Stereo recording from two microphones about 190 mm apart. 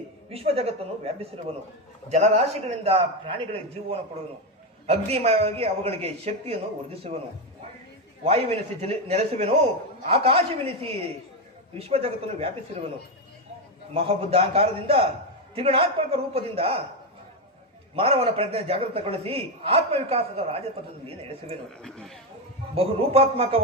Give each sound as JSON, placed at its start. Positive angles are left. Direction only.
{"t": 0.3, "sound": "a man's voice", "side_deg": -30}
{"t": 13.9, "sound": "a man's voice", "side_deg": -30}
{"t": 17.9, "sound": "a man's voice", "side_deg": -30}
{"t": 21.8, "sound": "speech", "side_deg": 5}
{"t": 22.7, "sound": "a man's voice", "side_deg": -30}